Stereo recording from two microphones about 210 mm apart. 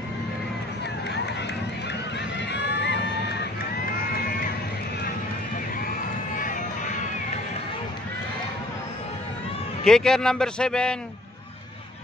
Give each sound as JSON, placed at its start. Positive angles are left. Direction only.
{"t": 2.3, "sound": "a sound", "side_deg": 55}
{"t": 5.9, "sound": "run", "side_deg": 40}
{"t": 9.8, "sound": "a man's voice", "side_deg": 0}